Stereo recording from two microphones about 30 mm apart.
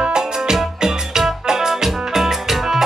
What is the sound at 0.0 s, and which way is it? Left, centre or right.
Music, right.